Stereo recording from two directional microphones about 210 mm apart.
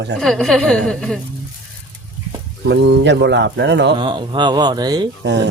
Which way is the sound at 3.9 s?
20° right (ahead or behind).